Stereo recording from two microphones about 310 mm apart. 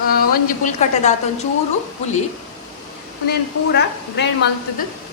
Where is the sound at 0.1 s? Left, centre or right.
Left.